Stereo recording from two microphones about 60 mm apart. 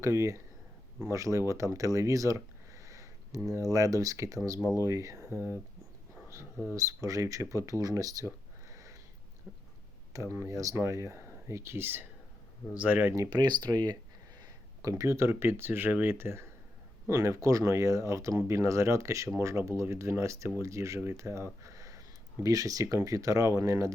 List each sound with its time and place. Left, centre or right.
0.0 s speech: right
5.3 s speech: right
6.7 s speech: right
8.7 s sniff: right
10.4 s speech: right
13.1 s speech: right
14.8 s speech: right
17.1 s speech: right
21.6 s a sound: right
22.4 s speech: right